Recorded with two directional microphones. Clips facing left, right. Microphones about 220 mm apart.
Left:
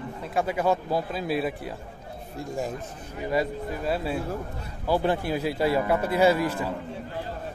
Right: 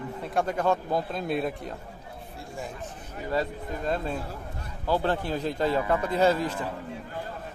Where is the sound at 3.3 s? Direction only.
10° left (ahead or behind).